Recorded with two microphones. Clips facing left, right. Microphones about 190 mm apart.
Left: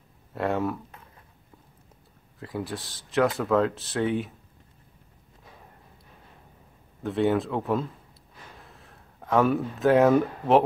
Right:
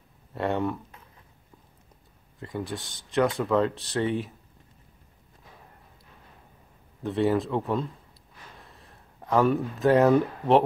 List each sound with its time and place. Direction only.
0.3 s speech: centre (ahead or behind)
2.3 s speech: centre (ahead or behind)
7.0 s speech: centre (ahead or behind)